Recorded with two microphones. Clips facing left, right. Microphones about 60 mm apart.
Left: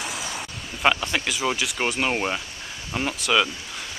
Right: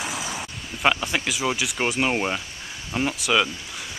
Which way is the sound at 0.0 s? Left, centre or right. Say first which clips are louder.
Right 1 dB; centre.